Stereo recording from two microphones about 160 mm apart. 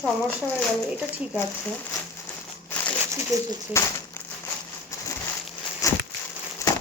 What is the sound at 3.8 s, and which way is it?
Speech, 15° left (ahead or behind).